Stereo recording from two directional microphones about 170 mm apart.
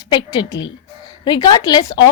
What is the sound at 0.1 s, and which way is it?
Speech, 25° left (ahead or behind).